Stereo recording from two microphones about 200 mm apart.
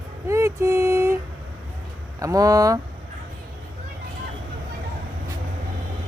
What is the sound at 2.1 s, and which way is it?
Speech, 15° right (ahead or behind).